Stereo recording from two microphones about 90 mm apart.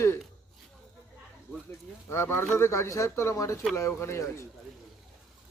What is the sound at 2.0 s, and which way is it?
Speech, 30° left (ahead or behind).